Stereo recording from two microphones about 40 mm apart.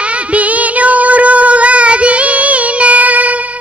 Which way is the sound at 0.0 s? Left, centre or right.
Right.